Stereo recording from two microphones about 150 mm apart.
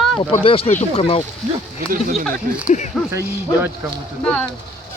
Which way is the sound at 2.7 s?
55° left (ahead or behind).